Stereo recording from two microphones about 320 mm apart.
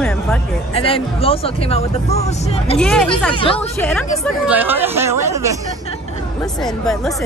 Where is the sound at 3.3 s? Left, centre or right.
Centre.